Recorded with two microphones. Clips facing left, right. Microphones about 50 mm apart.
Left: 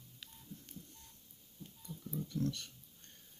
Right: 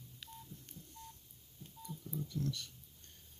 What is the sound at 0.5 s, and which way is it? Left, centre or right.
Telephone dialing, left.